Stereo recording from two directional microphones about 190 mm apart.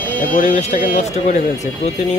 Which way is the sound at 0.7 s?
35° left (ahead or behind).